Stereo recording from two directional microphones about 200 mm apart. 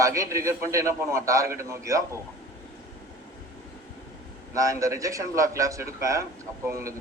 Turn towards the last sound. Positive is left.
turn(degrees=-15)  # may be behind; listen again after turning